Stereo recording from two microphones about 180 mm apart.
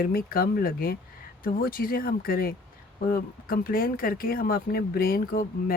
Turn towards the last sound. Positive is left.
turn(degrees=55)  # may be behind; listen again after turning